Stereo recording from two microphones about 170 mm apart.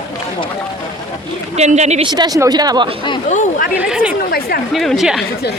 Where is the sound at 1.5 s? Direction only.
40° right (ahead or behind).